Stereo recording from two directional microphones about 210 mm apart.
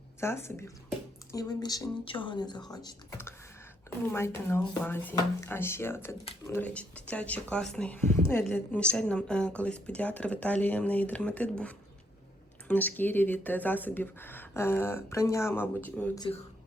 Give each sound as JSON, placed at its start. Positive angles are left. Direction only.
{"t": 0.2, "sound": "speech", "side_deg": 10}
{"t": 16.1, "sound": "speech", "side_deg": 20}